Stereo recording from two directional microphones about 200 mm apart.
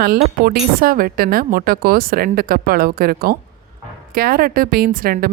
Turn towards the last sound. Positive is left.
turn(degrees=-45)  # may be behind; listen again after turning